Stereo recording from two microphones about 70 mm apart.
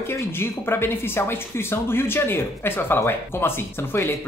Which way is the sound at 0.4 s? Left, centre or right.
Left.